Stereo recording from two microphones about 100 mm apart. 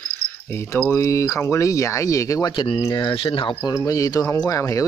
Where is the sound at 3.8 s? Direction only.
35° left (ahead or behind).